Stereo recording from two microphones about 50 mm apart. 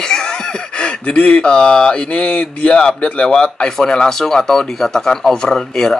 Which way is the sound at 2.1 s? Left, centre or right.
Left.